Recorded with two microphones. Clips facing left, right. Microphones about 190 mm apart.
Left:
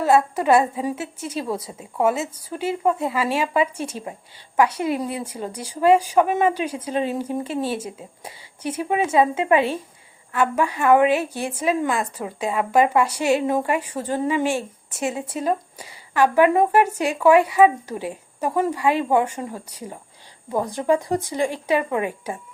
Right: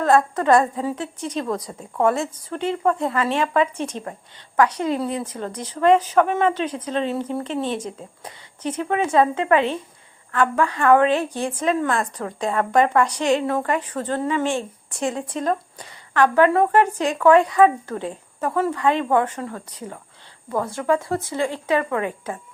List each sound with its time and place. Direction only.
0.0 s a woman's voice: 10° left (ahead or behind)